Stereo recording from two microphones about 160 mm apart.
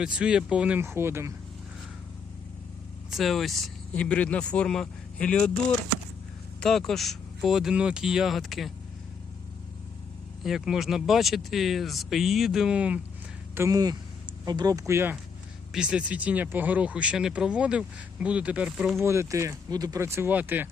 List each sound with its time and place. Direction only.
0.0 s speech: 5° right (ahead or behind)
3.1 s speech: centre (ahead or behind)
6.6 s speech: centre (ahead or behind)
10.4 s speech: centre (ahead or behind)
13.6 s speech: 20° right (ahead or behind); by 19.0 s centre (ahead or behind)
19.0 s speech: 15° right (ahead or behind)